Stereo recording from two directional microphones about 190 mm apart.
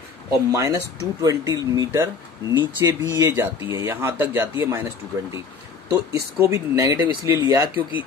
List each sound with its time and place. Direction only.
0.5 s speech: 15° right (ahead or behind)
5.9 s speech: 15° right (ahead or behind)